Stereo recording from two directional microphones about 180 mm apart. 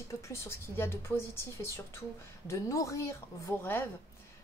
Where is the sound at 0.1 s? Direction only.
15° left (ahead or behind).